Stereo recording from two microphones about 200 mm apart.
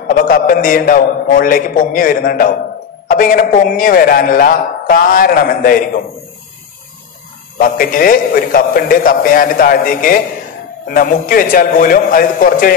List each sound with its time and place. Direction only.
0.1 s a man's voice: 45° left (ahead or behind)
7.5 s a man's voice: 45° left (ahead or behind)